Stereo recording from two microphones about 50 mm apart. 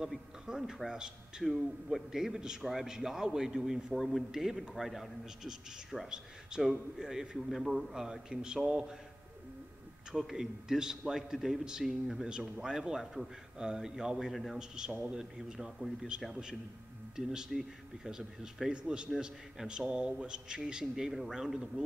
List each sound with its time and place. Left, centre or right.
0.1 s a sound: centre
0.8 s a man's voice: centre
6.0 s a man's voice: centre
10.1 s a man's voice: centre
12.3 s a man's voice: centre
14.3 s a man's voice: centre
15.0 s a man's voice: centre
20.8 s a man's voice: centre